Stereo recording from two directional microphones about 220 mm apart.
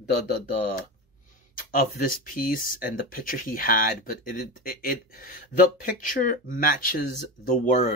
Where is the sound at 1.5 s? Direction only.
40° left (ahead or behind).